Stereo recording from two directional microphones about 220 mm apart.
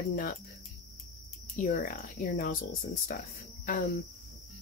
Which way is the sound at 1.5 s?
35° left (ahead or behind).